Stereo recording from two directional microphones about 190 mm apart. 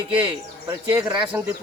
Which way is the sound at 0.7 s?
10° right (ahead or behind).